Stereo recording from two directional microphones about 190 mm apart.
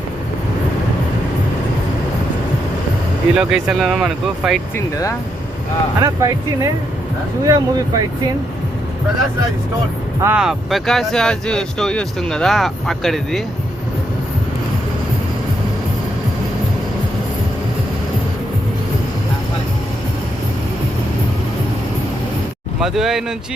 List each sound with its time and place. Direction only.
3.3 s speech: 5° right (ahead or behind)
6.0 s speech: 20° right (ahead or behind)
10.2 s speech: 10° right (ahead or behind)
22.8 s speech: centre (ahead or behind)